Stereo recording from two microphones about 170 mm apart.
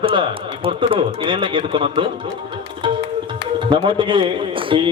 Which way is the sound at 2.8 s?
30° right (ahead or behind).